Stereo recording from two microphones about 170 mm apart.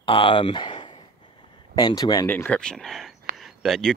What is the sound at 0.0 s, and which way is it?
Speech, 30° left (ahead or behind).